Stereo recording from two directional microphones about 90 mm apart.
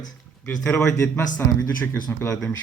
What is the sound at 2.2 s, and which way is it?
Speech, 10° left (ahead or behind).